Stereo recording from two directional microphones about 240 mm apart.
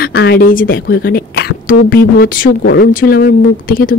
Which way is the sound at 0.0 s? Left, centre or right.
Left.